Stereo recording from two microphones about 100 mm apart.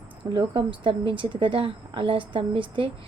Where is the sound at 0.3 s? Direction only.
55° right (ahead or behind).